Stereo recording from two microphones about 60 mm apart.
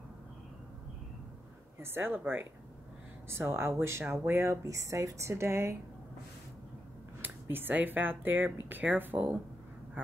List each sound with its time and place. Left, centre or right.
1.8 s speech: right
3.3 s a woman's voice: right
4.6 s a woman's voice: right
7.2 s speech: right